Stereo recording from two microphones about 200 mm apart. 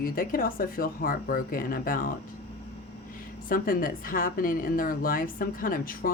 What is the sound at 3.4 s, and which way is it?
Speech, 45° left (ahead or behind).